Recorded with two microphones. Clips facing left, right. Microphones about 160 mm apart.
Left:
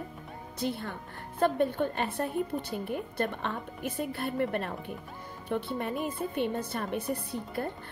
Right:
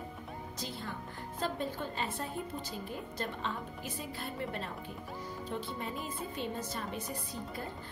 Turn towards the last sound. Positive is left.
turn(degrees=60)  # may be behind; listen again after turning